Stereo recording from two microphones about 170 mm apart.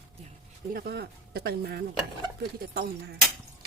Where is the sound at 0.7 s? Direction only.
70° right (ahead or behind).